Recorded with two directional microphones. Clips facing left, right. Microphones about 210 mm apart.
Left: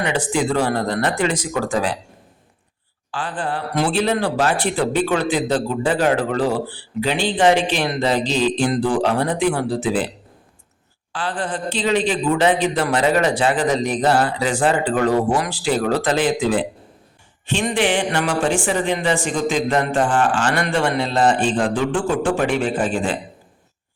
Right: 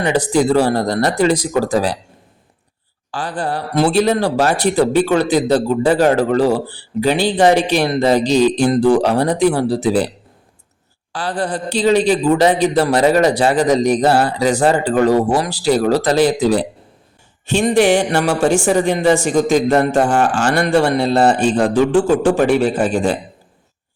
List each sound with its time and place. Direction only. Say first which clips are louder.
0.0 s a man's voice: right 5 dB; 40° right (ahead or behind)
3.1 s a man's voice: right 3 dB; 40° right (ahead or behind)
11.1 s a man's voice: right 4 dB; 40° right (ahead or behind)